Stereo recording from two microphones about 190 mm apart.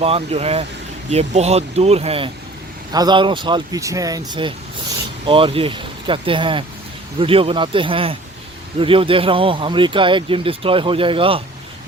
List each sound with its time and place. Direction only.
0.0 s speech: 30° right (ahead or behind)